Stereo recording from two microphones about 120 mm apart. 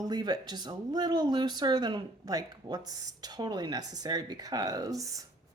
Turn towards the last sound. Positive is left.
turn(degrees=-30)  # may be behind; listen again after turning